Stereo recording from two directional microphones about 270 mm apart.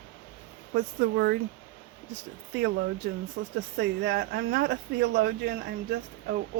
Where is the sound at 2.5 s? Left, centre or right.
Right.